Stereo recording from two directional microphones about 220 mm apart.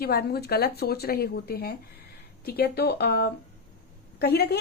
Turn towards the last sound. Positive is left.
turn(degrees=45)  # may be behind; listen again after turning